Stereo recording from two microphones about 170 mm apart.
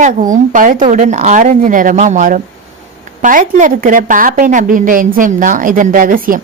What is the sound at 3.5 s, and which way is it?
A woman's voice, 50° right (ahead or behind).